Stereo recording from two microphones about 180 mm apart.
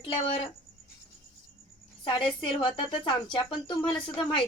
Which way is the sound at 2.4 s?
30° left (ahead or behind).